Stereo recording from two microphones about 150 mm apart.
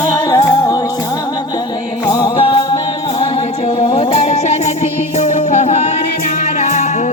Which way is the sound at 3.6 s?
40° left (ahead or behind).